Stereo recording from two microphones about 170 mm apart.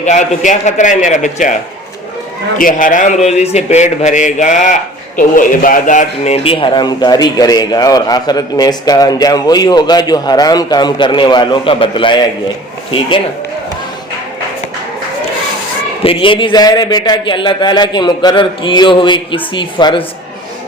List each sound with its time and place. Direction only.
0.0 s speech: 45° left (ahead or behind)
2.6 s a man's voice: 55° left (ahead or behind); by 13.2 s 30° left (ahead or behind)
16.0 s a man's voice: 30° left (ahead or behind)